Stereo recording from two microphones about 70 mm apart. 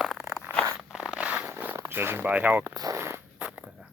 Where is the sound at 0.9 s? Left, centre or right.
Centre.